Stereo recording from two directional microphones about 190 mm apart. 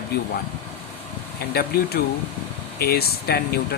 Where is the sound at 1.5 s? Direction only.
55° left (ahead or behind).